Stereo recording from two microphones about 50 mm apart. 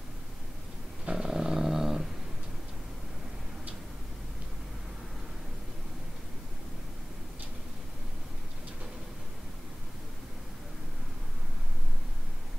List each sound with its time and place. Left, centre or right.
1.0 s dog: centre